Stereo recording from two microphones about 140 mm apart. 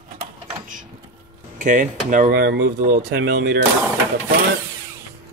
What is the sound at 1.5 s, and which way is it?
Speech, 65° right (ahead or behind).